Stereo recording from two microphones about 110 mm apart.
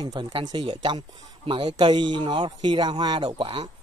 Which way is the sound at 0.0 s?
40° right (ahead or behind).